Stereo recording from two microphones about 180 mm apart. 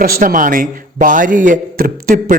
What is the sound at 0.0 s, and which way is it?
A man's voice, 50° right (ahead or behind).